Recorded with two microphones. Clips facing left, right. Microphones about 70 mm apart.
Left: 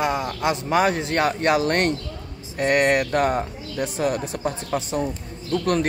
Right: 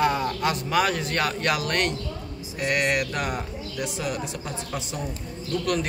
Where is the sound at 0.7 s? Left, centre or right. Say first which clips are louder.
Left 5 dB; left.